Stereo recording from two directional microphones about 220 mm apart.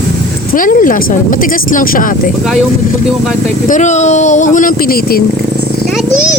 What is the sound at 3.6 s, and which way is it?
Speech, 35° left (ahead or behind).